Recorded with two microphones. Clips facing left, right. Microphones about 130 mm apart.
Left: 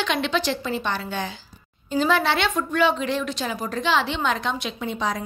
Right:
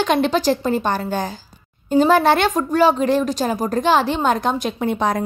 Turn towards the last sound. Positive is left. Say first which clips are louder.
# right 7 dB
turn(degrees=-55)  # may be behind; listen again after turning